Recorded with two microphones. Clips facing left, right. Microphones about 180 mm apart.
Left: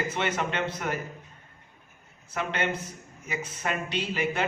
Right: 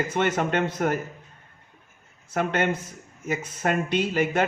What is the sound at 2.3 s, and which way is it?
A man's voice, 50° right (ahead or behind).